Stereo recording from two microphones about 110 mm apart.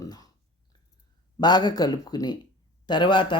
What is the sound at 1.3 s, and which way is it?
Speech, 40° left (ahead or behind).